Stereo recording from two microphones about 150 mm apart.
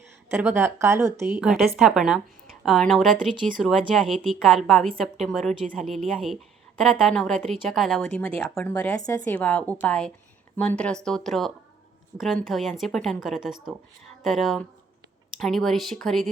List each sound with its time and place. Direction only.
0.4 s a woman's voice: 15° right (ahead or behind)
1.4 s a woman's voice: centre (ahead or behind)